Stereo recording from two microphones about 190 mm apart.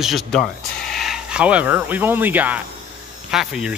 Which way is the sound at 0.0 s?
Centre (ahead or behind).